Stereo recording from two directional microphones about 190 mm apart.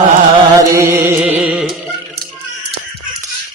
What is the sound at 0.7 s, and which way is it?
Music, 15° right (ahead or behind).